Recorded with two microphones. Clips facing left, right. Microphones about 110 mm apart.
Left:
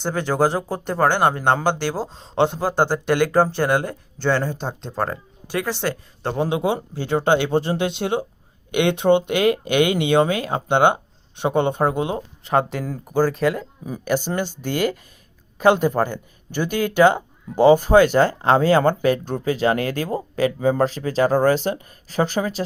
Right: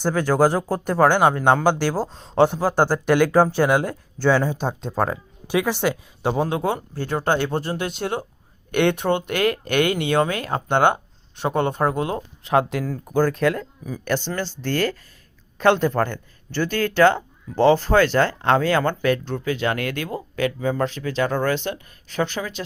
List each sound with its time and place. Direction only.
0.0 s speech: 5° right (ahead or behind)
3.1 s speech: 10° left (ahead or behind)
3.5 s speech: 10° right (ahead or behind)
6.5 s speech: 20° left (ahead or behind)
12.1 s speech: centre (ahead or behind)
12.8 s speech: 15° left (ahead or behind)
13.1 s speech: 5° left (ahead or behind)
18.5 s speech: 35° left (ahead or behind)